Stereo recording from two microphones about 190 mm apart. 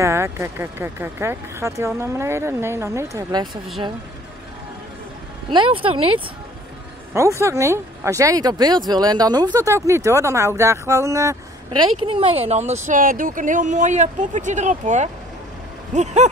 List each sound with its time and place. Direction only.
0.0 s speech: 15° right (ahead or behind)
5.5 s speech: 25° right (ahead or behind)
7.2 s speech: 15° right (ahead or behind); by 15.0 s 40° right (ahead or behind)
15.9 s vehicle: 40° right (ahead or behind)